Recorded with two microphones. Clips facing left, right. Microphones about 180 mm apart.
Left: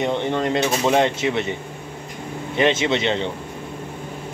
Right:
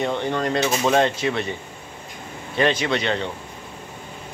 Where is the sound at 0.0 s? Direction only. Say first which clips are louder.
Left 2 dB; 20° left (ahead or behind).